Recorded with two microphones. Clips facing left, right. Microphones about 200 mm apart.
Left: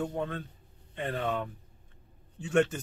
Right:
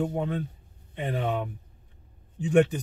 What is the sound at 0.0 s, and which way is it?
Speech, 10° right (ahead or behind).